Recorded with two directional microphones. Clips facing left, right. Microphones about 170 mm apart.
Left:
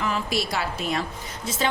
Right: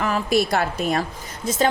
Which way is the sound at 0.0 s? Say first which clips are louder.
Right 6 dB; 50° right (ahead or behind).